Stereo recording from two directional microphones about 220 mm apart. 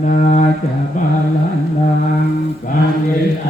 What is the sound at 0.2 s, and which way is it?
Mantra, 35° left (ahead or behind).